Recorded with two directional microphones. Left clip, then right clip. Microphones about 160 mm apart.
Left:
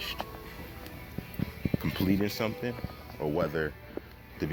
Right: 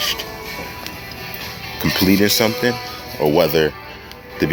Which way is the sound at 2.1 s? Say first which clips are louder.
Right 15 dB; 30° right (ahead or behind).